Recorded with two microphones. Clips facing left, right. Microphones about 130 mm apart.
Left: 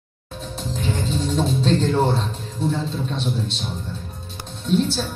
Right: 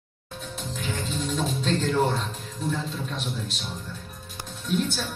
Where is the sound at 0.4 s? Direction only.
35° left (ahead or behind).